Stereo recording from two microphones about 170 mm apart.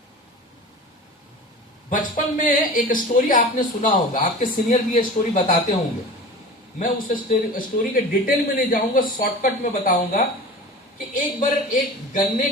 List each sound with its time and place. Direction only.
1.9 s speech: 50° left (ahead or behind)
6.7 s speech: 50° left (ahead or behind)